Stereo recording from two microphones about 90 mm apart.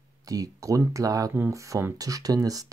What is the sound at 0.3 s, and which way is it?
Speech, 40° right (ahead or behind).